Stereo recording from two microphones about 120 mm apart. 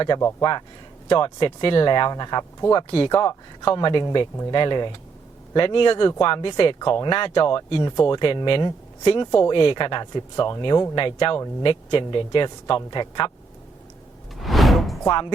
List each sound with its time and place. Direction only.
0.2 s speech: 20° left (ahead or behind)
1.0 s a man's voice: 40° left (ahead or behind)
14.4 s music: centre (ahead or behind)
15.0 s speech: 40° left (ahead or behind)